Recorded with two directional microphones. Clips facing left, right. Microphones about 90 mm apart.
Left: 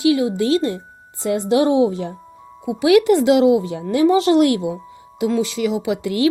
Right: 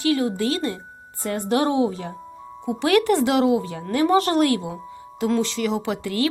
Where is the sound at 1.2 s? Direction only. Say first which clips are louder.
Left 5 dB; 50° right (ahead or behind).